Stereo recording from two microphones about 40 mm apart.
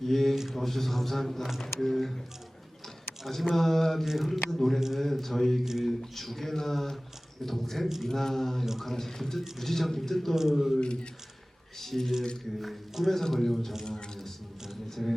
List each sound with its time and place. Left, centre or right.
0.0 s speech: centre
3.5 s speech: centre
4.0 s a man's voice: centre
4.4 s speech: centre
5.6 s a man's voice: centre
6.0 s speech: centre
10.3 s a man's voice: centre
10.8 s speech: left
11.8 s speech: centre
13.8 s a sound: centre
14.8 s a man's voice: centre